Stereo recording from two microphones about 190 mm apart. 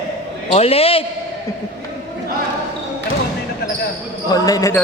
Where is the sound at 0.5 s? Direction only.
30° left (ahead or behind).